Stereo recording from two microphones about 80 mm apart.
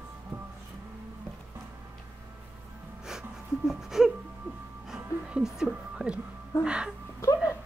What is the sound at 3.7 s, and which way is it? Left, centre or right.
Whimper, centre.